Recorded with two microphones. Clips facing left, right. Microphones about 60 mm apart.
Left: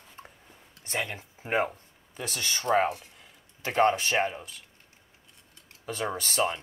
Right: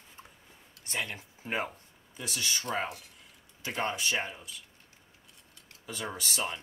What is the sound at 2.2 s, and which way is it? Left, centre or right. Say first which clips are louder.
Speech: left 2 dB; left.